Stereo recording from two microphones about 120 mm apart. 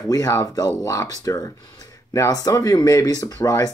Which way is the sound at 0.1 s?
30° left (ahead or behind).